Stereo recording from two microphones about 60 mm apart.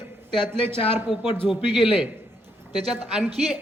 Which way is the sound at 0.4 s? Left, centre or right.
Right.